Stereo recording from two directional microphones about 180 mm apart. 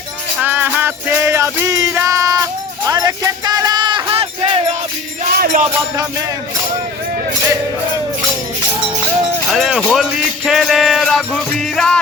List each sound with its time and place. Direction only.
0.3 s music: 10° right (ahead or behind); by 4.6 s 30° right (ahead or behind)
5.2 s music: 50° right (ahead or behind)
9.5 s music: centre (ahead or behind)